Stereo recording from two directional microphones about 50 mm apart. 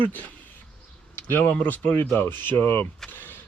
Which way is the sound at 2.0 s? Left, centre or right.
Left.